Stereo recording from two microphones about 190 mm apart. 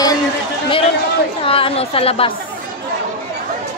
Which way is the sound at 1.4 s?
30° left (ahead or behind).